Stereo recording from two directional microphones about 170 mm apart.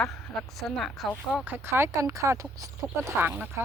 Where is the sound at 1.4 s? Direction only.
15° right (ahead or behind).